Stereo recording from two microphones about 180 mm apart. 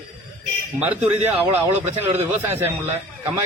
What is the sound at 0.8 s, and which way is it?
A man's voice, 5° right (ahead or behind).